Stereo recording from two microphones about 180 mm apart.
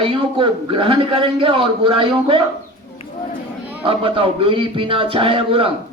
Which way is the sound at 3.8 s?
30° right (ahead or behind).